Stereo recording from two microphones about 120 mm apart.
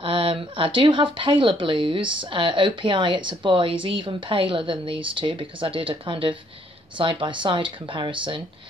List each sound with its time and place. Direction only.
0.0 s speech: 50° right (ahead or behind)